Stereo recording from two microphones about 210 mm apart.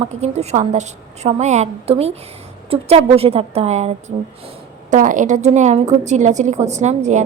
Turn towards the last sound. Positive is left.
turn(degrees=-35)  # may be behind; listen again after turning